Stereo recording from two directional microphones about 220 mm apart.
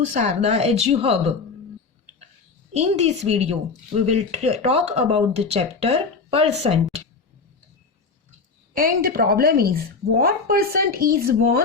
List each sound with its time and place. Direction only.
0.0 s speech: 35° right (ahead or behind)
2.7 s speech: 30° right (ahead or behind)
8.7 s speech: 40° right (ahead or behind)